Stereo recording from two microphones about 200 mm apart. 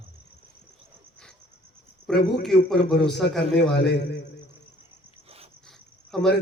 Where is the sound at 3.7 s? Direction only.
60° left (ahead or behind).